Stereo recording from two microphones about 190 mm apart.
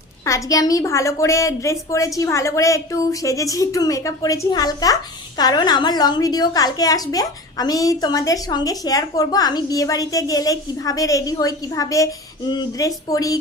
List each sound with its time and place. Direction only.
0.3 s a woman's voice: 15° left (ahead or behind)